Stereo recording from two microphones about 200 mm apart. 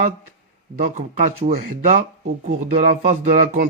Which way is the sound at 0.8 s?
40° right (ahead or behind).